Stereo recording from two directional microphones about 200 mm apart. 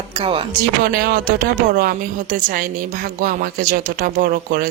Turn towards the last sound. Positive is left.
turn(degrees=-45)  # may be behind; listen again after turning